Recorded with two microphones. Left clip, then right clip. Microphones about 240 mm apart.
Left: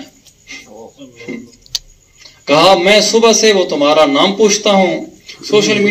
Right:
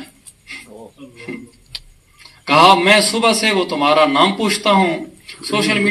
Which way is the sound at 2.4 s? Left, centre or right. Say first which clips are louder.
Left 2 dB; right.